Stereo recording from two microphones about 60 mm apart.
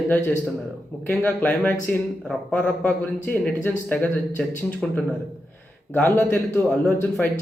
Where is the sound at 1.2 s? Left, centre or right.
Left.